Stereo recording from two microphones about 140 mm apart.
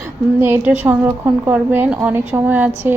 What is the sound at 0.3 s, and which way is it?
Speech, 15° right (ahead or behind).